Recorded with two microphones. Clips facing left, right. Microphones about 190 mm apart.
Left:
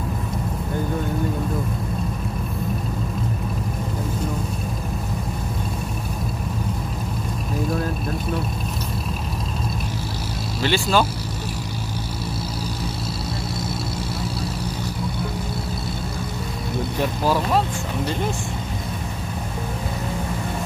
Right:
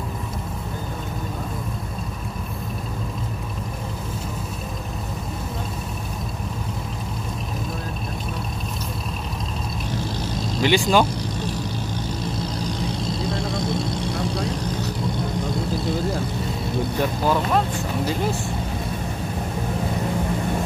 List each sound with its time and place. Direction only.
10.6 s speech: 15° right (ahead or behind)
12.4 s vehicle: 5° left (ahead or behind)